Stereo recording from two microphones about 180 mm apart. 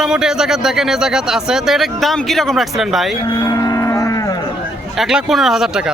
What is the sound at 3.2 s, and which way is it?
Livestock, 20° left (ahead or behind).